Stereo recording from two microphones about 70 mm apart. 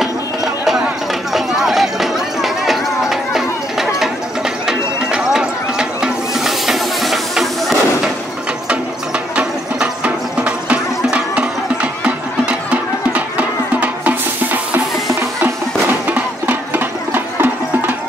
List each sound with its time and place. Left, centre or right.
1.3 s run: centre
4.6 s music: centre
9.3 s music: centre